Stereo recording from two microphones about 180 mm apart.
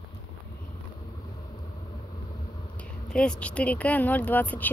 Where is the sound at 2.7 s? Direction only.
5° left (ahead or behind).